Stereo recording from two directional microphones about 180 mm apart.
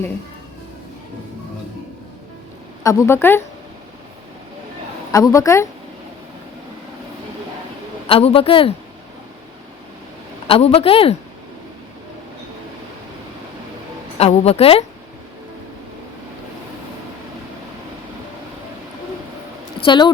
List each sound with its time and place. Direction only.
2.8 s a woman's voice: 20° left (ahead or behind)
5.1 s a woman's voice: 20° left (ahead or behind)
8.0 s speech: 30° left (ahead or behind)
10.4 s speech: 35° left (ahead or behind)
14.2 s speech: 35° left (ahead or behind)
19.8 s speech: 25° left (ahead or behind)